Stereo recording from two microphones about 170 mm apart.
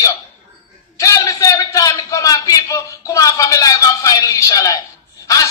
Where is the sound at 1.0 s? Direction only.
20° left (ahead or behind).